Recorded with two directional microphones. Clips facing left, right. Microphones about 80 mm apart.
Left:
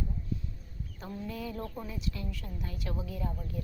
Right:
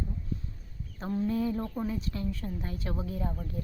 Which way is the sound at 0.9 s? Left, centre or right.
Right.